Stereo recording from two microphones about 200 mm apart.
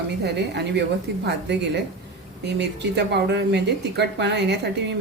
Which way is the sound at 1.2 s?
55° right (ahead or behind).